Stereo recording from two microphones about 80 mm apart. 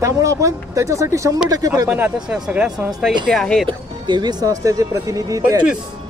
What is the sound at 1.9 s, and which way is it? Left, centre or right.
Speech, right.